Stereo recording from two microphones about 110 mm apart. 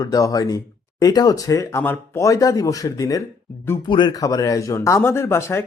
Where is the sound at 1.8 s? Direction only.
20° left (ahead or behind).